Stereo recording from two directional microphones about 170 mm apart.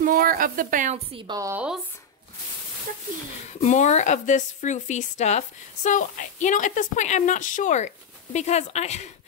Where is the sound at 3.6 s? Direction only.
45° left (ahead or behind).